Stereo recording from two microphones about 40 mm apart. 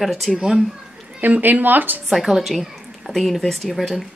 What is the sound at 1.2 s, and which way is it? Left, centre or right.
Speech, right.